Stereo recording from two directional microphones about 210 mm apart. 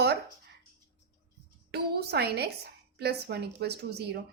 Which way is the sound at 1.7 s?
50° right (ahead or behind).